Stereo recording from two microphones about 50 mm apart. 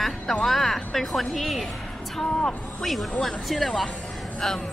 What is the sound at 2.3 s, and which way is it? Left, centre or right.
Speech, centre.